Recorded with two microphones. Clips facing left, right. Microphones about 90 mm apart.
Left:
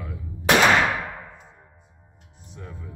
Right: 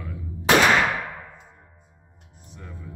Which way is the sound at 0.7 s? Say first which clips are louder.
Left 1 dB; centre (ahead or behind).